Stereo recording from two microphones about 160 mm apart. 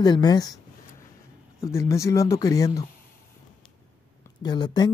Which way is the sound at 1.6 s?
20° left (ahead or behind).